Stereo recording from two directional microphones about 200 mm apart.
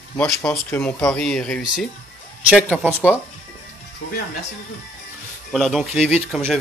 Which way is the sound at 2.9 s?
10° left (ahead or behind).